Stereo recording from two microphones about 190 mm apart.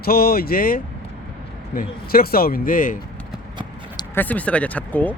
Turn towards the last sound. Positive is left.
turn(degrees=10)  # may be behind; listen again after turning